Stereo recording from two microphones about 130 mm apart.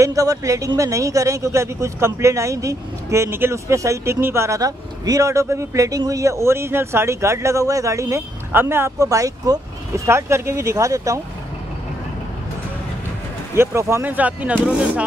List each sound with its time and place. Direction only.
0.0 s a man's voice: 25° right (ahead or behind)
13.6 s speech: 20° right (ahead or behind)